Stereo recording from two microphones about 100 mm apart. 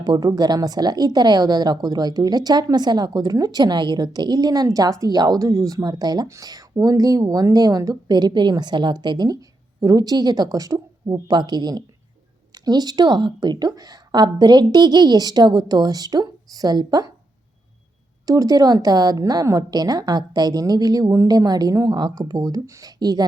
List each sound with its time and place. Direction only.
0.0 s a woman's voice: 45° right (ahead or behind)
11.3 s a woman's voice: 45° right (ahead or behind)
18.3 s a woman's voice: 35° right (ahead or behind)